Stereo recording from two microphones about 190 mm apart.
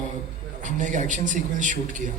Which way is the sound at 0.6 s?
40° right (ahead or behind).